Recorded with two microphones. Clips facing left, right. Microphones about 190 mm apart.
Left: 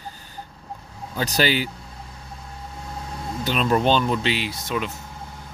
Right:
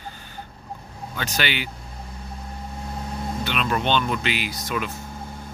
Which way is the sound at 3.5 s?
35° left (ahead or behind).